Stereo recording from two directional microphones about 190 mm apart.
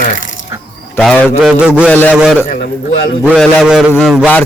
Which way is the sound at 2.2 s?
5° right (ahead or behind).